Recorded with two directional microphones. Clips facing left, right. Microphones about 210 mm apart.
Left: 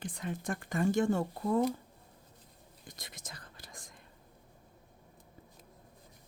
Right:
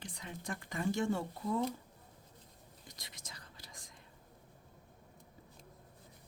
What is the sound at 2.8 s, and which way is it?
Whispering, 50° left (ahead or behind).